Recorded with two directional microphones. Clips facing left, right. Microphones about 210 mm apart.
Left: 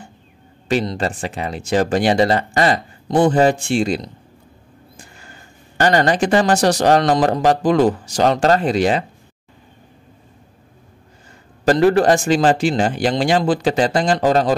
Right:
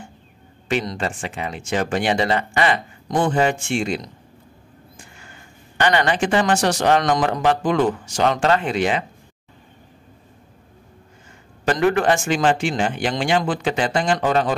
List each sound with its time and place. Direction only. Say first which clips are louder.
0.7 s speech: left 4 dB; 35° left (ahead or behind)
11.6 s speech: left 5 dB; 35° left (ahead or behind)